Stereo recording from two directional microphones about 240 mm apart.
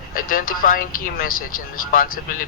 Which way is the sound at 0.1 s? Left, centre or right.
Left.